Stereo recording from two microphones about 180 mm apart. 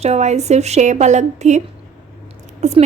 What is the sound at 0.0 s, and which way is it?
A woman's voice, 40° right (ahead or behind).